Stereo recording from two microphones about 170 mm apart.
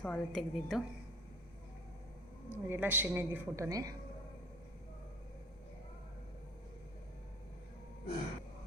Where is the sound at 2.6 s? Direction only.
10° right (ahead or behind).